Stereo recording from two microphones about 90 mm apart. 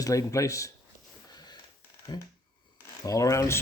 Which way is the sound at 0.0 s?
35° left (ahead or behind).